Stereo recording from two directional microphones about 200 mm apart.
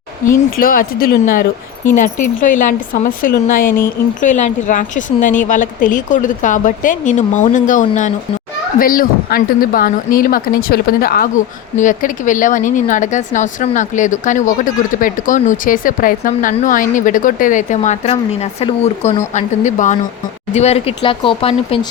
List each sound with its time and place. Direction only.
0.3 s speech: 45° left (ahead or behind); by 21.8 s 25° left (ahead or behind)